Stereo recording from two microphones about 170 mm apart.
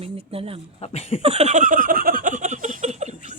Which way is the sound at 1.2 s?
40° right (ahead or behind).